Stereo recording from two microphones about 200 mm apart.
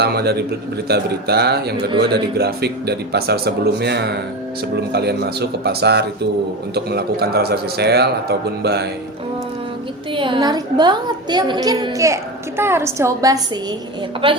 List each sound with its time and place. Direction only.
0.0 s speech: 55° right (ahead or behind)
10.2 s a woman's voice: 25° right (ahead or behind)